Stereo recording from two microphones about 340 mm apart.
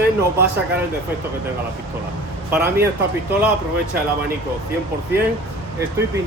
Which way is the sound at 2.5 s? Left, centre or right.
Centre.